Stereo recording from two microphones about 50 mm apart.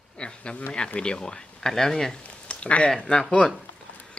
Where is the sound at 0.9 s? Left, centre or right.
Centre.